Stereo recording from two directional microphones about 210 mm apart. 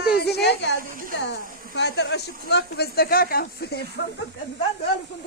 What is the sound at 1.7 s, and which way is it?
Speech, 55° left (ahead or behind).